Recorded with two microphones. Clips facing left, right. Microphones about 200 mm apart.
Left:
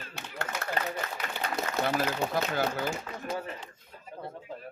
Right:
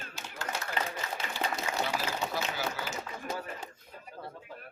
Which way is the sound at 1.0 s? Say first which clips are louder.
Even; 60° left (ahead or behind).